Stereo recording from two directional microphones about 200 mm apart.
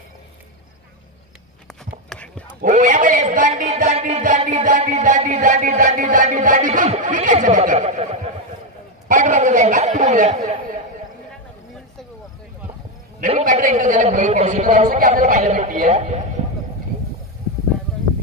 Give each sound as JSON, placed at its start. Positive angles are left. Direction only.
{"t": 2.0, "sound": "whispering", "side_deg": 5}
{"t": 2.6, "sound": "a man's voice", "side_deg": -40}
{"t": 9.1, "sound": "a sound", "side_deg": -40}
{"t": 13.3, "sound": "a man's voice", "side_deg": -40}